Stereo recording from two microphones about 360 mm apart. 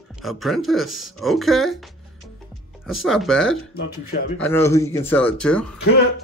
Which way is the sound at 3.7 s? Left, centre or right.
Left.